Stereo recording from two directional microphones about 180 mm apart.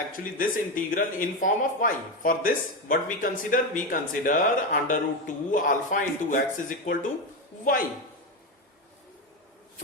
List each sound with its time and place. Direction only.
0.1 s speech: 50° left (ahead or behind)